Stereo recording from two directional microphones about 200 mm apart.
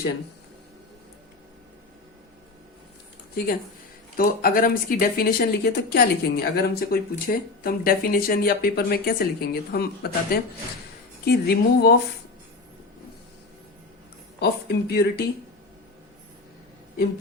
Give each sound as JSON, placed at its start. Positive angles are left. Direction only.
{"t": 4.2, "sound": "speech", "side_deg": 45}
{"t": 14.3, "sound": "speech", "side_deg": 55}